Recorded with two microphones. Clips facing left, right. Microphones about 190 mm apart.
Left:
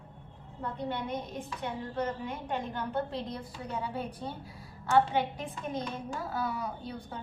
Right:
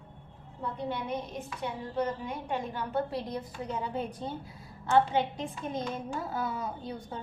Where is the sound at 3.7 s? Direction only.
20° right (ahead or behind).